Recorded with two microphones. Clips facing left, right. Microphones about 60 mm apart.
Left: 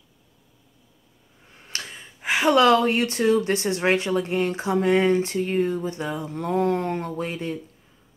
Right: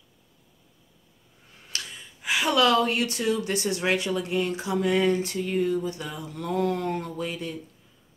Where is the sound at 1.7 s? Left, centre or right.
Left.